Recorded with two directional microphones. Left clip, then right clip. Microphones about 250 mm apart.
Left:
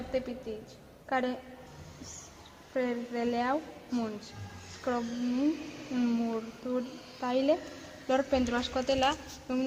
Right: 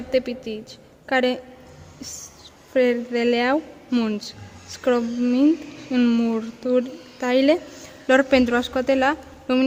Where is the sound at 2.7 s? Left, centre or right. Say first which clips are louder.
Right 13 dB; right.